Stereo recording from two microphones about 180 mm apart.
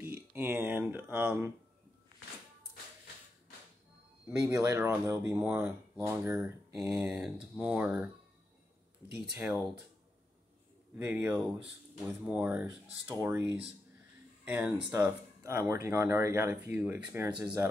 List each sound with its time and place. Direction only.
0.0 s speech: 10° right (ahead or behind)
4.3 s speech: 15° right (ahead or behind)
9.3 s speech: 5° right (ahead or behind)
11.0 s speech: 10° right (ahead or behind)